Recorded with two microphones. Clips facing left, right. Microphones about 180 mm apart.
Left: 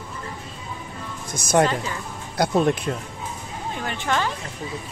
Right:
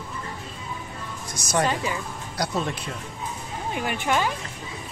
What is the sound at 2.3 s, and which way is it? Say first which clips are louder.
Speech: left 8 dB; 55° left (ahead or behind).